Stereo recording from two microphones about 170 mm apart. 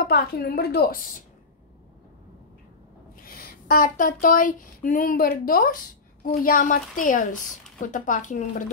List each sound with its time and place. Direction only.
0.0 s a woman's voice: 65° left (ahead or behind)
3.3 s a sound: 60° left (ahead or behind)
6.4 s a woman's voice: 55° left (ahead or behind)